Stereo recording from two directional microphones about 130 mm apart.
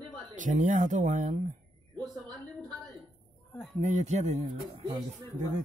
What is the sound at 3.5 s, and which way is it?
Speech, centre (ahead or behind).